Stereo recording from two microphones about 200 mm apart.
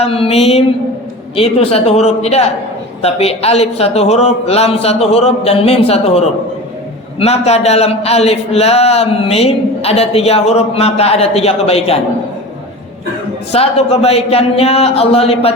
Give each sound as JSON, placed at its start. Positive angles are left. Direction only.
{"t": 0.0, "sound": "mantra", "side_deg": 30}
{"t": 13.5, "sound": "mantra", "side_deg": 30}